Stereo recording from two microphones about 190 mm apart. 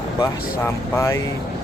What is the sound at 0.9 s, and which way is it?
Speech, 15° left (ahead or behind).